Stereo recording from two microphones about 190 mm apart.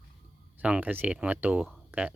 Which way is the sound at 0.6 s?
10° right (ahead or behind).